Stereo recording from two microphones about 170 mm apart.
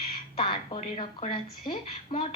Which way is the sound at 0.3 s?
30° left (ahead or behind).